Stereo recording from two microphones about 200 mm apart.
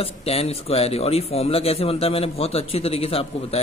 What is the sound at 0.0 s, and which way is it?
Speech, 30° left (ahead or behind).